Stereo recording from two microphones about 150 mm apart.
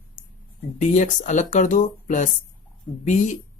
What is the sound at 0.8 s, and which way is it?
Speech, 55° left (ahead or behind).